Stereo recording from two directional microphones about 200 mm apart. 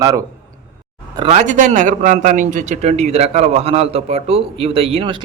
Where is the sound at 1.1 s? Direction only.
30° right (ahead or behind).